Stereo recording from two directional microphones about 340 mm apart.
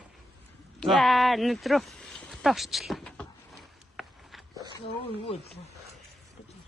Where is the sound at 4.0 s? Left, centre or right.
Centre.